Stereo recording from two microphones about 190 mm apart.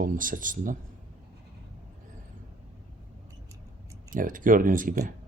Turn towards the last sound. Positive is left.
turn(degrees=-45)  # may be behind; listen again after turning